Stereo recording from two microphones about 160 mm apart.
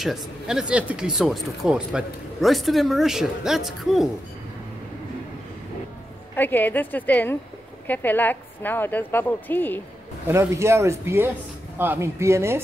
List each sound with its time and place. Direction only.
0.0 s speech: centre (ahead or behind)
6.3 s a woman's voice: 10° left (ahead or behind)
10.2 s speech: 15° right (ahead or behind)